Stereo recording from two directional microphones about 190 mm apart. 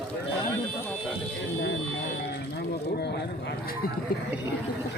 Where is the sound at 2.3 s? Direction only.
60° left (ahead or behind).